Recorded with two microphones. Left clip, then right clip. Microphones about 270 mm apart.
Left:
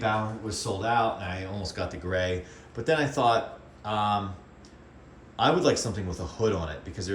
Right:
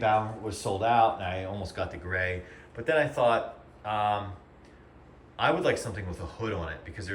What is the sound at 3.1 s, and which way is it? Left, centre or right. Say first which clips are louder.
Speech: left 1 dB; left.